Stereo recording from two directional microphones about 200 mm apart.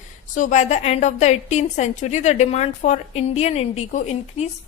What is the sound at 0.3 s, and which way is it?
A woman's voice, 40° left (ahead or behind).